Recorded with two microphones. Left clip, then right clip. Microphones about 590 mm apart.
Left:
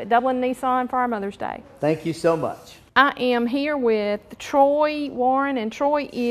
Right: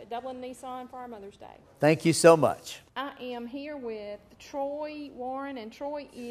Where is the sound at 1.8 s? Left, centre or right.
Right.